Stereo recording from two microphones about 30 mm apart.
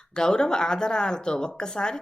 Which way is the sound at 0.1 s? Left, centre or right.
Left.